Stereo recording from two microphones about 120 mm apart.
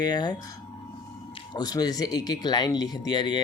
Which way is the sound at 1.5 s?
35° left (ahead or behind).